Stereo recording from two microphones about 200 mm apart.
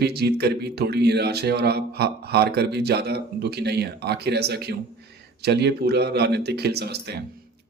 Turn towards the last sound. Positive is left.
turn(degrees=-55)  # may be behind; listen again after turning